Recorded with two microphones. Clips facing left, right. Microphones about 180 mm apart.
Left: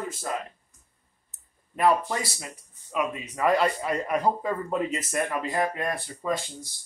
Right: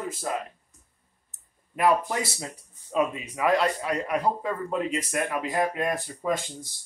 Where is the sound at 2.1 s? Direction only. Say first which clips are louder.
Right 1 dB; 20° right (ahead or behind).